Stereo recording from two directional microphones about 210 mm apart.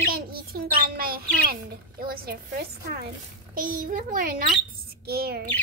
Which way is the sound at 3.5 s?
40° right (ahead or behind).